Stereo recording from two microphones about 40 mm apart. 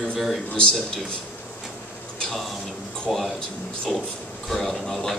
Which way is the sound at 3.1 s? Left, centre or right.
Centre.